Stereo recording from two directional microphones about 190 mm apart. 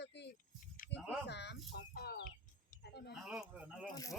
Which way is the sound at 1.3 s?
65° left (ahead or behind).